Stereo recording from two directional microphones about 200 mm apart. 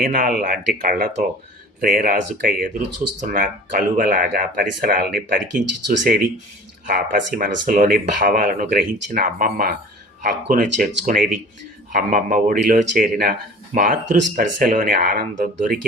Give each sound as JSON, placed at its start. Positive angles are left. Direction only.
{"t": 0.0, "sound": "speech", "side_deg": -45}